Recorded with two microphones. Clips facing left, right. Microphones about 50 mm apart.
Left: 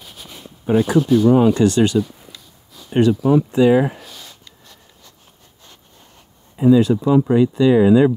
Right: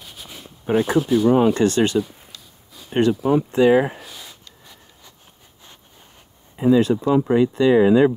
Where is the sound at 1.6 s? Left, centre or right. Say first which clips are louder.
Left 3 dB; right.